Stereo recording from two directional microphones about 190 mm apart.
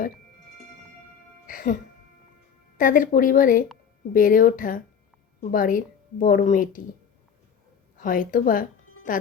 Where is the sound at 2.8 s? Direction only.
45° left (ahead or behind).